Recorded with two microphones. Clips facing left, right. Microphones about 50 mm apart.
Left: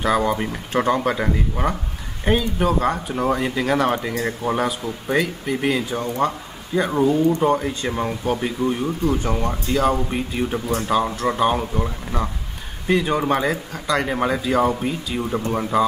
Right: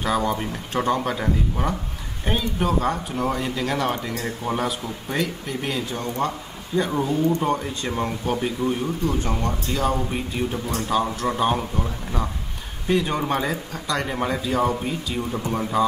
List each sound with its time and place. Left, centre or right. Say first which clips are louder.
0.0 s speech: left 3 dB; centre
2.2 s speech: left 4 dB; centre
3.3 s speech: left 4 dB; centre
15.1 s speech: left 4 dB; centre